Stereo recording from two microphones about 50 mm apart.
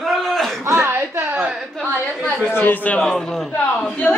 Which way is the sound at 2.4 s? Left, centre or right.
Left.